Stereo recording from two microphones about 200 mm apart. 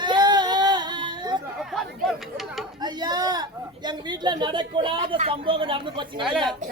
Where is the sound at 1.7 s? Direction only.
Centre (ahead or behind).